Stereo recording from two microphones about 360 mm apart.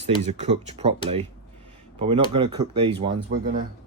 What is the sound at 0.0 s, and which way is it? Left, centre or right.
Speech, centre.